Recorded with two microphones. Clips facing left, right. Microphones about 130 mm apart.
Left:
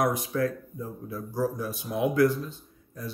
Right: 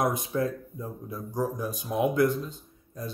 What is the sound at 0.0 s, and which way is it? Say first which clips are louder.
Speech: left 1 dB; 20° right (ahead or behind).